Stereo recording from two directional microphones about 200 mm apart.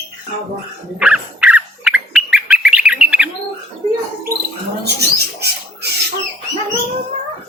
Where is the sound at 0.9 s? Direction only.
5° right (ahead or behind).